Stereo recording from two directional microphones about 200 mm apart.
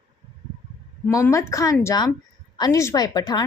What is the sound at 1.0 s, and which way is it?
A woman's voice, 15° left (ahead or behind).